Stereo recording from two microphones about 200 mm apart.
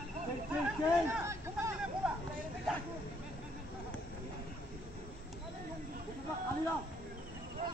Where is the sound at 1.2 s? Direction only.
15° right (ahead or behind).